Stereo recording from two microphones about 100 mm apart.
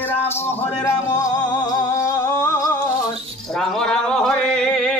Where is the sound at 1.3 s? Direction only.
45° left (ahead or behind).